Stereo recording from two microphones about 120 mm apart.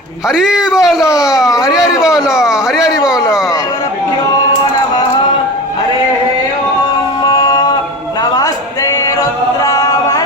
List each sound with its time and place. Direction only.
0.3 s speech: 5° right (ahead or behind)
1.5 s speech: 30° left (ahead or behind)
1.7 s speech: 5° right (ahead or behind)
7.3 s music: 35° left (ahead or behind)
8.2 s a sound: 30° left (ahead or behind)
9.6 s music: 30° left (ahead or behind)